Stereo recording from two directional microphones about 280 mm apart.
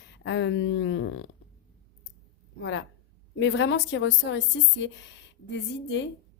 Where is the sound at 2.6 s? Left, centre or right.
Left.